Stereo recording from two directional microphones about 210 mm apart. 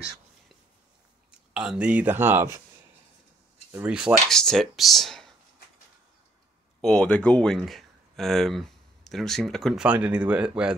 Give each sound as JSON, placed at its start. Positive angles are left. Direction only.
{"t": 1.5, "sound": "speech", "side_deg": -5}
{"t": 3.7, "sound": "speech", "side_deg": -5}
{"t": 6.8, "sound": "speech", "side_deg": 5}